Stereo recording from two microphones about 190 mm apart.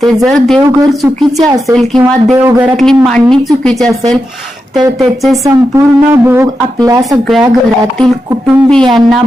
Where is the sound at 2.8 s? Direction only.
Centre (ahead or behind).